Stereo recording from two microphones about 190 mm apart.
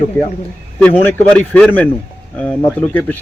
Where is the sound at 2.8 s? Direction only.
10° left (ahead or behind).